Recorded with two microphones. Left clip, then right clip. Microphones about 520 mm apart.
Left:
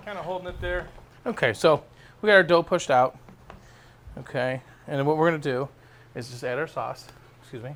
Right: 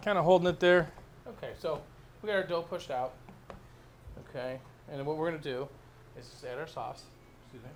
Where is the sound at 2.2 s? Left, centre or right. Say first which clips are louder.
Left 14 dB; left.